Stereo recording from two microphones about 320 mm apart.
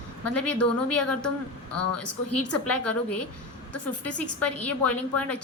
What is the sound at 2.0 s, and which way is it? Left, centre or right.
Speech, left.